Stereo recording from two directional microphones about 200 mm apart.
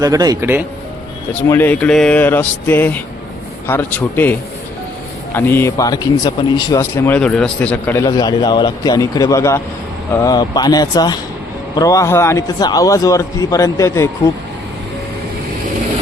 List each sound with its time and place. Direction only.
0.0 s speech: 20° right (ahead or behind)
1.4 s speech: 10° left (ahead or behind)